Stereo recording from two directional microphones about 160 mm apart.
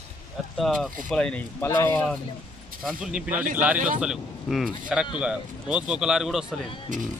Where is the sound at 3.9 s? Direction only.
Centre (ahead or behind).